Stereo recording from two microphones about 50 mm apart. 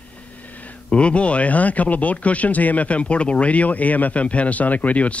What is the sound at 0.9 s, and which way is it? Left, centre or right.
Speech, left.